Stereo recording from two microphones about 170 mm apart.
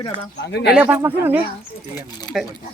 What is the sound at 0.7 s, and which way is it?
Speech, 5° right (ahead or behind).